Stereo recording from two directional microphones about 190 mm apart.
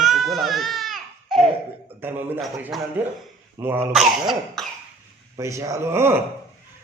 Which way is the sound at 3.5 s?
10° right (ahead or behind).